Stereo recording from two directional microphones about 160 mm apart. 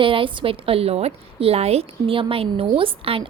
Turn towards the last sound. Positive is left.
turn(degrees=-35)  # may be behind; listen again after turning